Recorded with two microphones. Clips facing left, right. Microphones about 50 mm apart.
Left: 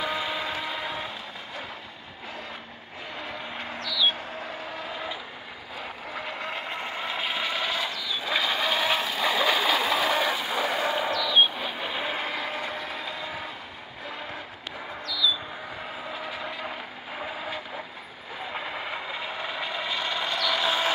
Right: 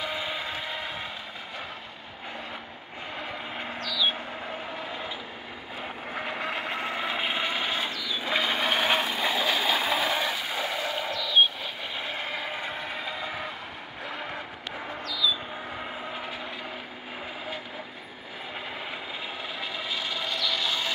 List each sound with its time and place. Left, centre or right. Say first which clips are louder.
0.0 s a sound: left 3 dB; centre
3.2 s vehicle: even; centre
6.0 s vehicle: right 2 dB; right
9.3 s train: left 4 dB; centre
10.6 s a sound: left 6 dB; left
11.3 s vehicle: right 2 dB; centre
14.0 s boat: right 1 dB; right
18.9 s vehicle: left 3 dB; centre
20.4 s vehicle: left 5 dB; left